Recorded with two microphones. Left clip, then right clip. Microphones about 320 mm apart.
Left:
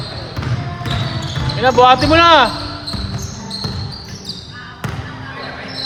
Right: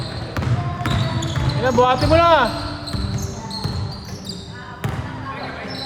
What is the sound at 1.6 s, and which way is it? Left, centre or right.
Speech, left.